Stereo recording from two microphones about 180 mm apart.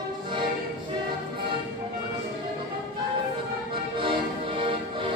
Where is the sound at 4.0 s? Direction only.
30° right (ahead or behind).